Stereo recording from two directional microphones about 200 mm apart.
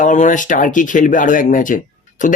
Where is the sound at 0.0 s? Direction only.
40° left (ahead or behind).